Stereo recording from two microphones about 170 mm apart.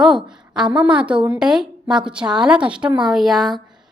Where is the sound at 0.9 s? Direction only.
5° right (ahead or behind).